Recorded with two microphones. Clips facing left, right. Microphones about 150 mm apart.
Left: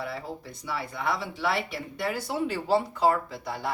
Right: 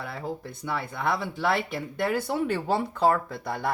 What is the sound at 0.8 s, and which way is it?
Speech, centre (ahead or behind).